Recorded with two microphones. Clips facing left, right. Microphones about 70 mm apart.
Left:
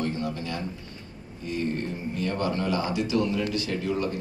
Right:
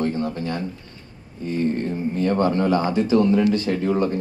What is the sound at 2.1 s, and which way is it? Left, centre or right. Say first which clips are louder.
A man's voice: right 8 dB; right.